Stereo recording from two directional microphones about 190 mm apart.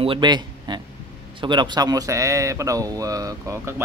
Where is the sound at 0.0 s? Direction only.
25° right (ahead or behind).